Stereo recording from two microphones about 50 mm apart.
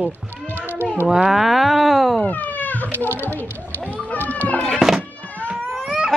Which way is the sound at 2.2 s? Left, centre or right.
Left.